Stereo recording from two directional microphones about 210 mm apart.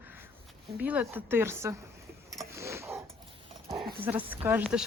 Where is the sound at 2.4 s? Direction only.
15° right (ahead or behind).